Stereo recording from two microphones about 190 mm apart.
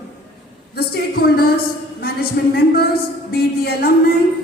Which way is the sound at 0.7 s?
55° left (ahead or behind).